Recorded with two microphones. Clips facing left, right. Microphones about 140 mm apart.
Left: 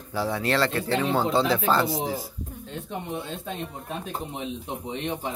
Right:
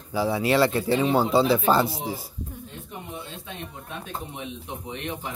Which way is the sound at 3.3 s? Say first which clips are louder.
Left 5 dB; 35° left (ahead or behind).